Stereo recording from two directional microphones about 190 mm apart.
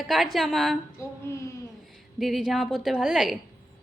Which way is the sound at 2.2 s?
Centre (ahead or behind).